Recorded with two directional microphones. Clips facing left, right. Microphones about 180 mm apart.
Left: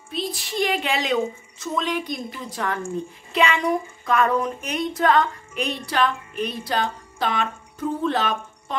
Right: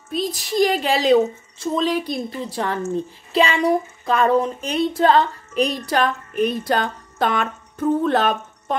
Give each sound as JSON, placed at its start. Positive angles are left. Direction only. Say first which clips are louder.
{"t": 0.1, "sound": "a woman's voice", "louder": "right 5 dB", "side_deg": -40}
{"t": 5.9, "sound": "a woman's voice", "louder": "right 2 dB", "side_deg": -45}